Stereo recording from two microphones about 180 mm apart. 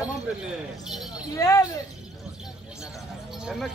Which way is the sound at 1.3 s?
20° left (ahead or behind).